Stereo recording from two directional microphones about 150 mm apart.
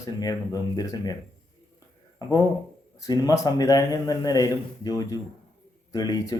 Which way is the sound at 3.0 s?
25° left (ahead or behind).